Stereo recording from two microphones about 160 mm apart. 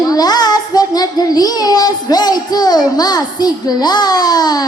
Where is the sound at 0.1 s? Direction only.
25° left (ahead or behind).